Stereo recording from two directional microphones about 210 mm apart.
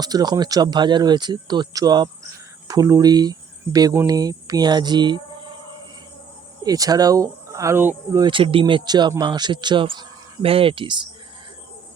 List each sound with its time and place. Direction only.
0.0 s speech: 20° right (ahead or behind)
6.6 s speech: 15° right (ahead or behind)